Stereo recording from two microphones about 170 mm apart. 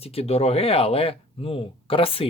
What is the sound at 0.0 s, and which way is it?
Speech, 35° left (ahead or behind).